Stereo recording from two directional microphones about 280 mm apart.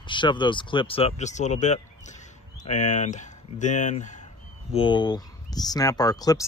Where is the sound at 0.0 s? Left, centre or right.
Centre.